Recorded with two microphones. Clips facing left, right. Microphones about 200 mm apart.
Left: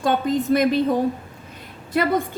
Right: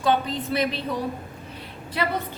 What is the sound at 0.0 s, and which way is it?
A woman's voice, 50° left (ahead or behind).